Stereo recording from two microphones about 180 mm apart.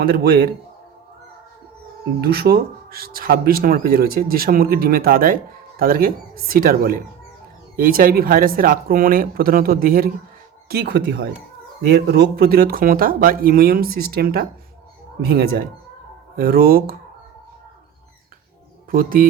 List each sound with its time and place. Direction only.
0.0 s speech: 60° right (ahead or behind)
2.2 s speech: 60° right (ahead or behind)
18.9 s speech: 50° right (ahead or behind)